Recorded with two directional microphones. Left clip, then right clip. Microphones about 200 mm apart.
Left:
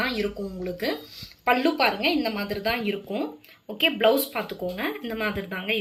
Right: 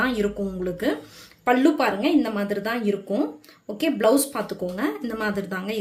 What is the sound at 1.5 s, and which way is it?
Speech, 60° right (ahead or behind).